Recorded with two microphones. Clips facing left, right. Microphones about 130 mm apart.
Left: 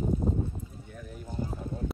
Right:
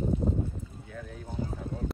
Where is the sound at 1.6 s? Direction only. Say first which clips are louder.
Even; centre (ahead or behind).